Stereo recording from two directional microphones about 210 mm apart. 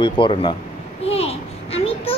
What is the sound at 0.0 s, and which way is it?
Speech, 25° left (ahead or behind).